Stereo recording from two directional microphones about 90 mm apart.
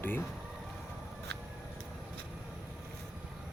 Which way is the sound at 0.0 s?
25° left (ahead or behind).